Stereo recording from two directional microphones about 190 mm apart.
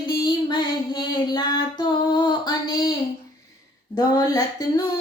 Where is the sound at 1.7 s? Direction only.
25° left (ahead or behind).